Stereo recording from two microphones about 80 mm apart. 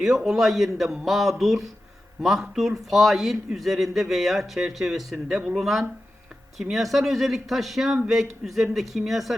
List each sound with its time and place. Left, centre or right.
0.0 s a man's voice: centre